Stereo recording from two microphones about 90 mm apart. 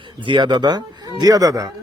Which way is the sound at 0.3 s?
55° right (ahead or behind).